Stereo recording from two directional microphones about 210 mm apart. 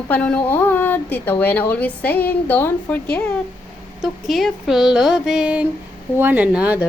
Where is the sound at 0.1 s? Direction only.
5° left (ahead or behind).